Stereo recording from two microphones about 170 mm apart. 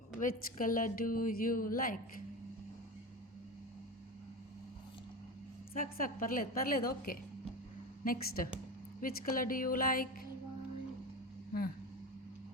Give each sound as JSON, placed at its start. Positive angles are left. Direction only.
{"t": 0.2, "sound": "a woman's voice", "side_deg": 50}
{"t": 5.7, "sound": "a woman's voice", "side_deg": 55}